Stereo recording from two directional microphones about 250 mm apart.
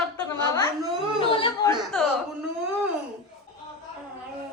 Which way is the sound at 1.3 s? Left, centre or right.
Left.